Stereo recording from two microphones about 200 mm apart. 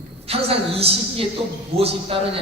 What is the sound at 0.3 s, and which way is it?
A woman's voice, 30° right (ahead or behind).